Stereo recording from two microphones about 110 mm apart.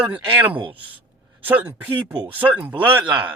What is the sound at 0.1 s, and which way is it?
Speech, 15° right (ahead or behind).